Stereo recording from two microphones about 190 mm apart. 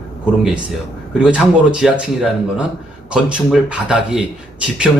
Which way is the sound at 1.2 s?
5° right (ahead or behind).